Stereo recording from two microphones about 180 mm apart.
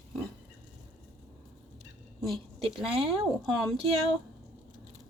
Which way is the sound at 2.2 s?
Centre (ahead or behind).